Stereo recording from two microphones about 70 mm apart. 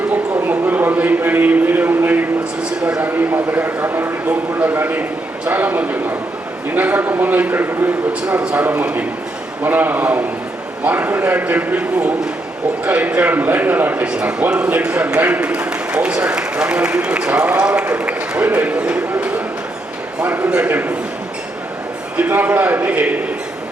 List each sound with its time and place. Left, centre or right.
0.4 s a sound: right
3.0 s a man's voice: right
8.3 s a man's voice: centre
14.1 s a man's voice: centre
22.2 s a man's voice: right